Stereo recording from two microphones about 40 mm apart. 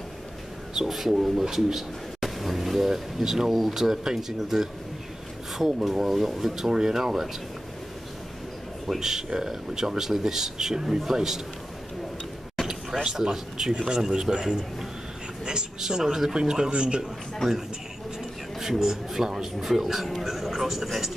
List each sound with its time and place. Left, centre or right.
0.7 s speech: centre
9.0 s speech: centre
12.6 s speech: centre
18.6 s speech: centre
20.2 s a sound: centre